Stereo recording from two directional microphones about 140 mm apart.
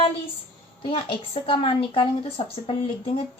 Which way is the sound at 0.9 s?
40° left (ahead or behind).